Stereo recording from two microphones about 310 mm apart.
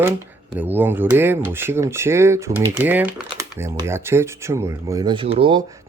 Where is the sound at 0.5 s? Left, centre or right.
Centre.